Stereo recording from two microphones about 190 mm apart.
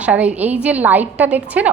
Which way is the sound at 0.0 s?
5° right (ahead or behind).